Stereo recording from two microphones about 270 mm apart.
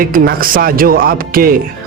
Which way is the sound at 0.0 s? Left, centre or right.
Right.